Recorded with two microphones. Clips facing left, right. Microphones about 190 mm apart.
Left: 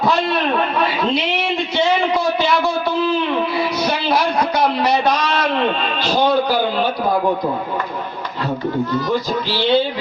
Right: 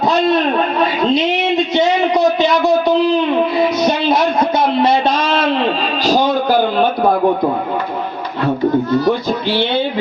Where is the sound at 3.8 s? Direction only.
20° right (ahead or behind).